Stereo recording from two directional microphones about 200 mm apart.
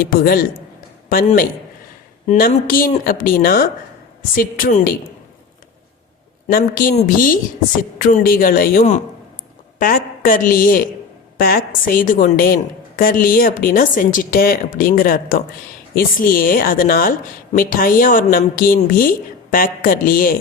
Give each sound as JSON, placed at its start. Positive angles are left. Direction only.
{"t": 0.0, "sound": "speech", "side_deg": 50}
{"t": 6.5, "sound": "a woman's voice", "side_deg": 45}